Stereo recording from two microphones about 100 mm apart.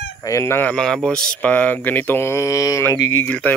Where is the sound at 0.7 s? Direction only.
5° left (ahead or behind); by 3.3 s 25° left (ahead or behind).